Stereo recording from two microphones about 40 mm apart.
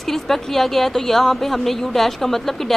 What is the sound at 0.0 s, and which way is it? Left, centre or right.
A woman's voice, centre.